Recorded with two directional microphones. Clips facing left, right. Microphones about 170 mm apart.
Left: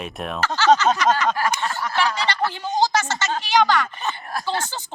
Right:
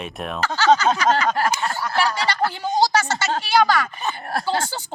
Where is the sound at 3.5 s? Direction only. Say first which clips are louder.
Even; 10° right (ahead or behind).